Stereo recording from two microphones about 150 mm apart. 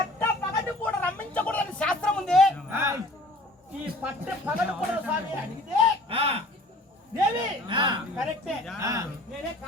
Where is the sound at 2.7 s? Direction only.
15° right (ahead or behind).